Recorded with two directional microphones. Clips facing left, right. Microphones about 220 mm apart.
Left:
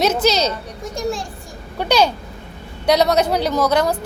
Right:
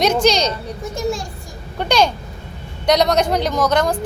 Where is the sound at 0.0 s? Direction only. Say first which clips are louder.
Right 1 dB; 5° left (ahead or behind).